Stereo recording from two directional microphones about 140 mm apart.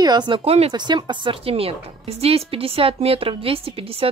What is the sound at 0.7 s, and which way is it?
A woman's voice, 30° right (ahead or behind).